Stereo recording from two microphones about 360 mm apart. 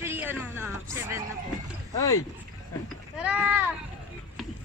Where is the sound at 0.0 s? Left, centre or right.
Centre.